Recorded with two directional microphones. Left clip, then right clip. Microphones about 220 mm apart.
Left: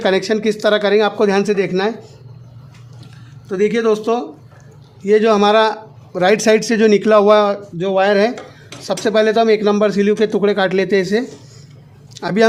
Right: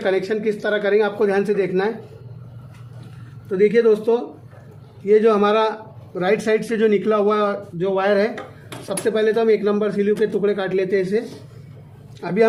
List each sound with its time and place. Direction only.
0.0 s speech: 50° left (ahead or behind)
3.5 s speech: 55° left (ahead or behind)